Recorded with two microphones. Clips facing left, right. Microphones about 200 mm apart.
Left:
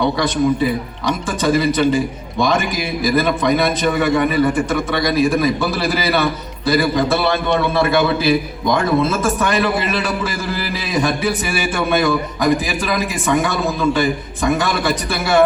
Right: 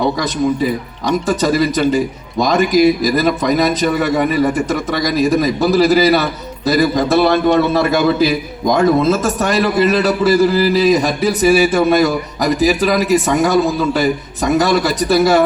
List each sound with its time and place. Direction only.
1.3 s a man's voice: 40° right (ahead or behind)